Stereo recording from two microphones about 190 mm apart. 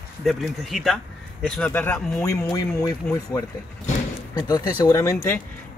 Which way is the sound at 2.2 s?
15° left (ahead or behind).